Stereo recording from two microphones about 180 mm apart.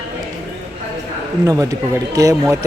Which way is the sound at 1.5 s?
20° right (ahead or behind).